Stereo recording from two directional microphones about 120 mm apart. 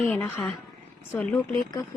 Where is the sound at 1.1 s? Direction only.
15° left (ahead or behind).